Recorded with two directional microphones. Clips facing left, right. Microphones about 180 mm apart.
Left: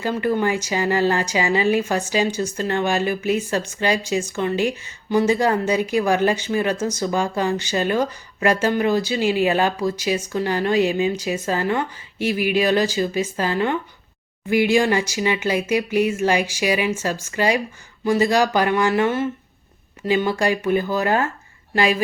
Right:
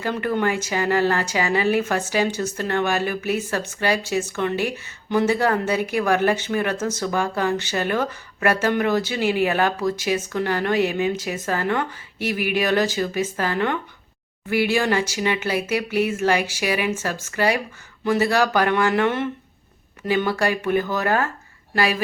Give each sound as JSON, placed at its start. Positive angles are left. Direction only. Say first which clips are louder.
{"t": 0.0, "sound": "speech", "louder": "left 2 dB", "side_deg": 10}